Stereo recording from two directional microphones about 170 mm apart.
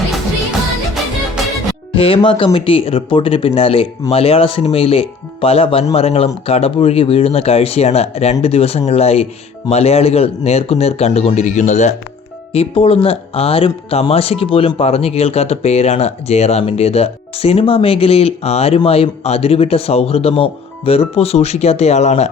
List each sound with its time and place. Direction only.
2.0 s speech: 30° left (ahead or behind)
12.5 s speech: 30° left (ahead or behind)